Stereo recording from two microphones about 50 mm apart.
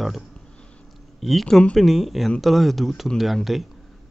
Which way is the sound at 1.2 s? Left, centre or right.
Centre.